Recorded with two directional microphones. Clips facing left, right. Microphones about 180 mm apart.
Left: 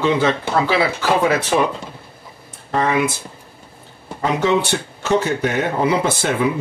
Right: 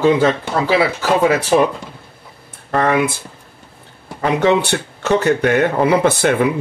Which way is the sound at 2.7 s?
55° right (ahead or behind).